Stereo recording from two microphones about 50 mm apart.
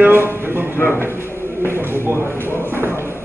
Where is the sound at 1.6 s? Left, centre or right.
Right.